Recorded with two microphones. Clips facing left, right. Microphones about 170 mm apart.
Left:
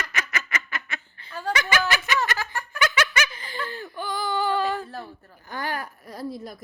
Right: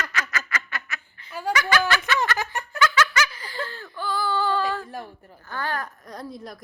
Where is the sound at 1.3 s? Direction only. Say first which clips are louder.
Right 2 dB; 10° right (ahead or behind).